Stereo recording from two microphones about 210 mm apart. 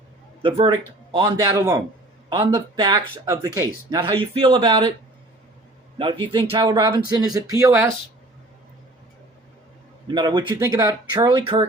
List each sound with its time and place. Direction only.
0.4 s speech: 25° right (ahead or behind)
6.0 s speech: 25° right (ahead or behind)
10.2 s speech: 20° right (ahead or behind)